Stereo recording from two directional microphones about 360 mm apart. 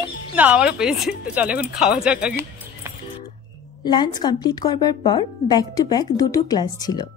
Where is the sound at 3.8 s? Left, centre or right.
Centre.